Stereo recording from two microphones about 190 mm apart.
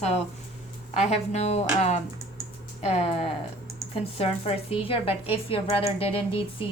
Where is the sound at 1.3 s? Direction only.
35° left (ahead or behind).